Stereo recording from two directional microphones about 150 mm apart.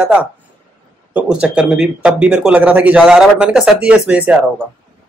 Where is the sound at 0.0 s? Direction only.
10° right (ahead or behind).